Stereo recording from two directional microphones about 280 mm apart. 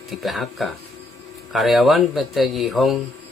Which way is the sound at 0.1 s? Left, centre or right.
Centre.